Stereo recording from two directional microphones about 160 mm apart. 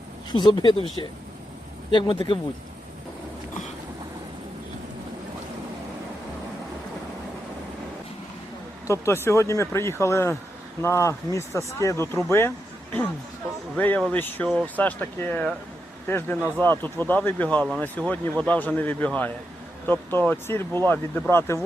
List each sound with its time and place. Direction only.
0.3 s speech: 25° left (ahead or behind)
1.9 s speech: 30° left (ahead or behind)
8.9 s speech: 15° left (ahead or behind)